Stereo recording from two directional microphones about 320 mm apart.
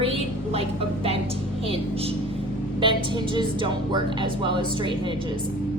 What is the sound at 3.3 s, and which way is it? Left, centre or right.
A woman's voice, centre.